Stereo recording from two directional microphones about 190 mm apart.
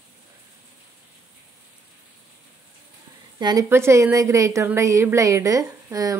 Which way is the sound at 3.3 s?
20° right (ahead or behind).